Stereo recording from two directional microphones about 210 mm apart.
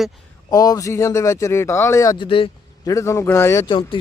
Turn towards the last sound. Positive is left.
turn(degrees=25)  # may be behind; listen again after turning